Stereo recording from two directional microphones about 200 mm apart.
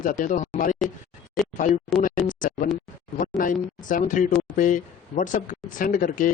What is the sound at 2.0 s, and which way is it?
A man's voice, 40° left (ahead or behind).